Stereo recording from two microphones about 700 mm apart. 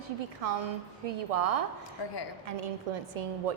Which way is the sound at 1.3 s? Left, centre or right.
Right.